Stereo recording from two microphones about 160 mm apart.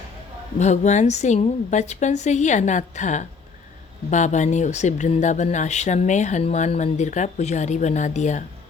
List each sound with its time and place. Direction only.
0.6 s speech: 45° left (ahead or behind)